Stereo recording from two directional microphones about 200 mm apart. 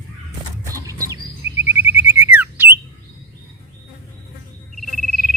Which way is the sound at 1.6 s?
10° right (ahead or behind).